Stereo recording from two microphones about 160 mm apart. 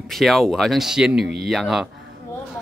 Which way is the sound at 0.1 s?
Centre (ahead or behind).